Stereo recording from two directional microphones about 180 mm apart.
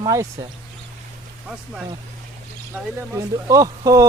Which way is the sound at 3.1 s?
20° right (ahead or behind).